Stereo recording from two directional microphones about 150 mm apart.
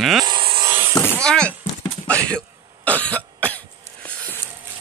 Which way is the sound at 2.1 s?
10° left (ahead or behind).